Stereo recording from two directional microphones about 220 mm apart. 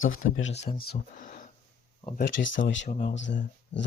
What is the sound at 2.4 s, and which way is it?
Speech, 55° left (ahead or behind).